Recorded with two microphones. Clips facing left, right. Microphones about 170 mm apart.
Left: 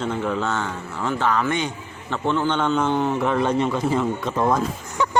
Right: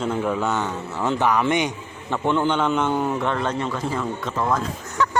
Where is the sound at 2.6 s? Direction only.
Centre (ahead or behind).